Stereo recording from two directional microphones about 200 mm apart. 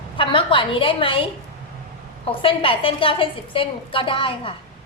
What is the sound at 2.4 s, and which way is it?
A woman's voice, 25° left (ahead or behind).